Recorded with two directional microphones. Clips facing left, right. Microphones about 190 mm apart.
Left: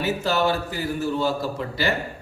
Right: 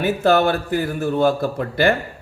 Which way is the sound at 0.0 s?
55° right (ahead or behind).